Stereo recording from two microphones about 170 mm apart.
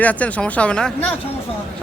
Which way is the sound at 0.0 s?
10° left (ahead or behind).